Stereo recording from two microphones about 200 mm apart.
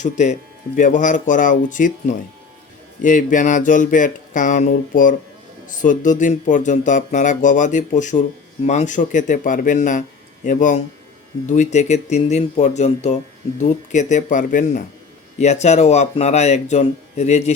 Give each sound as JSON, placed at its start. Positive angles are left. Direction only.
{"t": 0.0, "sound": "speech", "side_deg": 35}